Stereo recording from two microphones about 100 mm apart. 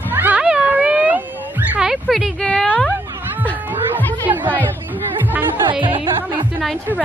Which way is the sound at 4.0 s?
20° left (ahead or behind).